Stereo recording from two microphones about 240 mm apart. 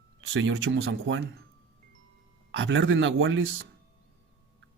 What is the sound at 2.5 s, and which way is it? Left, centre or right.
Speech, right.